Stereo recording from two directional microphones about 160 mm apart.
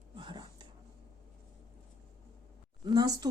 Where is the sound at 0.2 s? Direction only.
30° right (ahead or behind).